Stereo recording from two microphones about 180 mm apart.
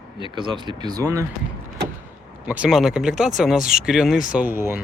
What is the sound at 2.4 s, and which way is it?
Speech, 5° right (ahead or behind).